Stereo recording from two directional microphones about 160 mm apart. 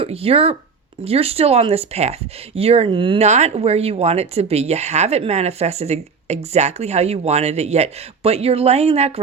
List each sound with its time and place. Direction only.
0.0 s speech: 35° right (ahead or behind)
3.2 s speech: 45° right (ahead or behind)